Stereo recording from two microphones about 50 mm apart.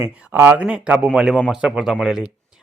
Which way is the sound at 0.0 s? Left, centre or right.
Right.